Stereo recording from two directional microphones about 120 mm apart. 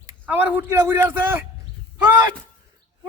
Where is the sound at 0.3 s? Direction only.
15° right (ahead or behind).